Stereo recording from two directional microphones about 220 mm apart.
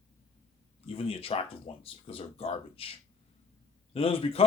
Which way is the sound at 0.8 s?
25° left (ahead or behind).